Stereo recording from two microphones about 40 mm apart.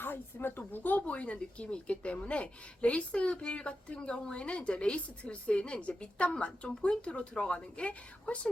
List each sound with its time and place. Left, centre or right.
0.0 s speech: left
1.0 s a woman's voice: left